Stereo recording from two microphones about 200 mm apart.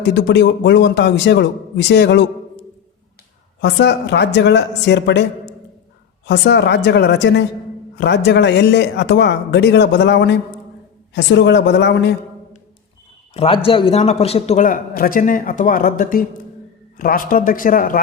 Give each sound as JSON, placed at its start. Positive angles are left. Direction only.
{"t": 0.1, "sound": "a man's voice", "side_deg": 60}
{"t": 3.6, "sound": "a man's voice", "side_deg": 60}
{"t": 6.2, "sound": "a man's voice", "side_deg": 60}
{"t": 13.3, "sound": "a man's voice", "side_deg": 30}